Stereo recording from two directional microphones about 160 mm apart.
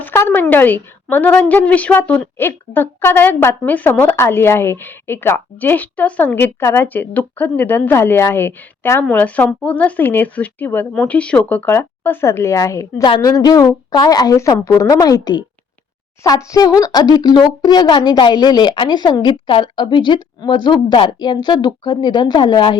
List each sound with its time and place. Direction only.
0.0 s a woman's voice: 15° left (ahead or behind)